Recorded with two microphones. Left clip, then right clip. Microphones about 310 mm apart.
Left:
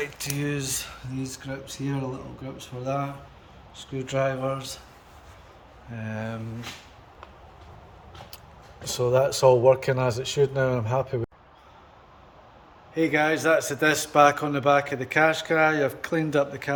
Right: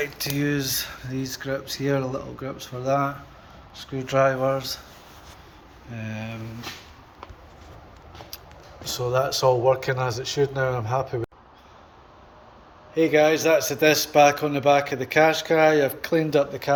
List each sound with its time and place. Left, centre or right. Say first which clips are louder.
0.0 s speech: right 4 dB; centre
5.9 s a man's voice: left 1 dB; centre
8.9 s speech: left 1 dB; left
12.9 s a man's voice: right 4 dB; centre